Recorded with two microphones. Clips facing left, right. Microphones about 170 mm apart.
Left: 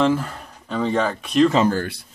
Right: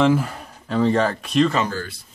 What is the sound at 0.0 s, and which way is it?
Speech, 10° right (ahead or behind).